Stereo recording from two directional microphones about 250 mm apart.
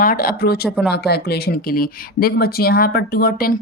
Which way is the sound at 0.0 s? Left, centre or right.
Left.